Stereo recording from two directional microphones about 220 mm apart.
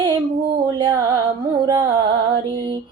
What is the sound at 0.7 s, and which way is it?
Music, 20° right (ahead or behind).